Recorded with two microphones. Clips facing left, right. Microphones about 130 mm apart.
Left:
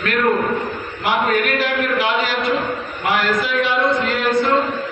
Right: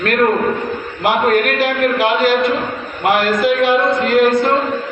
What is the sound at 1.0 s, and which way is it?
A man's voice, 50° right (ahead or behind).